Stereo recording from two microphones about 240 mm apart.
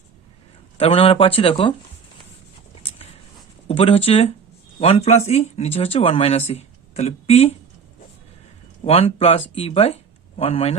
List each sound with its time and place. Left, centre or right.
0.8 s speech: left
3.7 s speech: left
8.8 s speech: left